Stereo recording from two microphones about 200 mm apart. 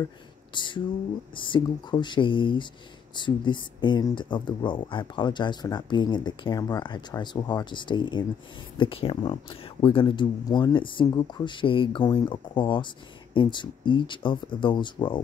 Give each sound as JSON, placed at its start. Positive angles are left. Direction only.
{"t": 0.6, "sound": "speech", "side_deg": 25}